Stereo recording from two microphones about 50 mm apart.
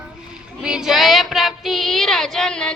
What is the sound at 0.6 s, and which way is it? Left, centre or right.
Child singing, centre.